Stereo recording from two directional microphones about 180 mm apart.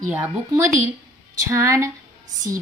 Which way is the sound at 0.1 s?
15° right (ahead or behind).